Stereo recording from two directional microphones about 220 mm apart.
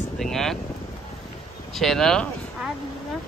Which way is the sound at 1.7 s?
Centre (ahead or behind).